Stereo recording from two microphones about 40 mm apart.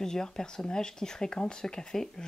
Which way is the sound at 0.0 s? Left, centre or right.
Centre.